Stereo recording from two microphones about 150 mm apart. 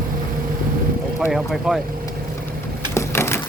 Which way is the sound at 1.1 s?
Centre (ahead or behind).